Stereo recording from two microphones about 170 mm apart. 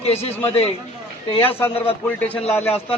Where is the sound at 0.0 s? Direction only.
35° left (ahead or behind).